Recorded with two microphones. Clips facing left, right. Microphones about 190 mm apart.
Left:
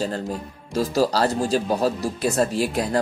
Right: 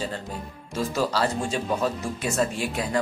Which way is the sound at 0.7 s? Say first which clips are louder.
Left 5 dB; 35° left (ahead or behind).